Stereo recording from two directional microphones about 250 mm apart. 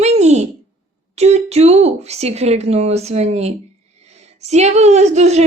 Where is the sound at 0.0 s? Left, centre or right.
Right.